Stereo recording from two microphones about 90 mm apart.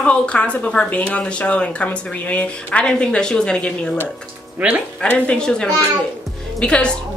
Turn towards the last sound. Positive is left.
turn(degrees=10)  # may be behind; listen again after turning